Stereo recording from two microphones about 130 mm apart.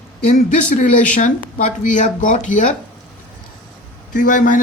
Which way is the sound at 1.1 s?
75° left (ahead or behind).